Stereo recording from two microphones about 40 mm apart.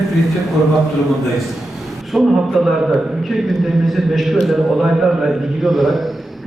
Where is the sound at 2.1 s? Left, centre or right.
Centre.